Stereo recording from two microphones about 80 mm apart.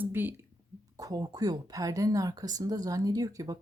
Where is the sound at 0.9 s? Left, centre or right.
Right.